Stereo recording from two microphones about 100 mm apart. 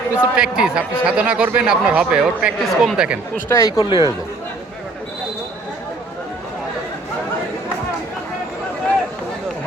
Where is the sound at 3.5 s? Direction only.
40° left (ahead or behind).